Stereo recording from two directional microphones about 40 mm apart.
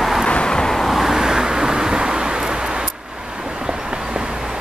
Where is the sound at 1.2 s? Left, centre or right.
Centre.